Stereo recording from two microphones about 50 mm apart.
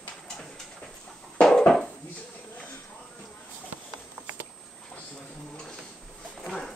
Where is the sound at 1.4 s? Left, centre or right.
Centre.